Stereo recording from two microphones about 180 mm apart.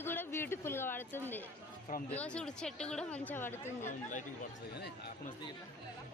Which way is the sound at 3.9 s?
45° left (ahead or behind).